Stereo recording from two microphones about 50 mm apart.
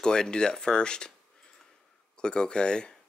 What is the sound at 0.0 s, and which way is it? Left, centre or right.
Speech, centre.